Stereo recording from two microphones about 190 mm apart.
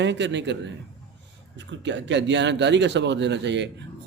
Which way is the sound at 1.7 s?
70° right (ahead or behind).